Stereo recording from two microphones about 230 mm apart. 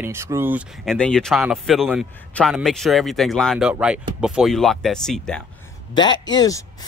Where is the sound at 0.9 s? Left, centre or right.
Centre.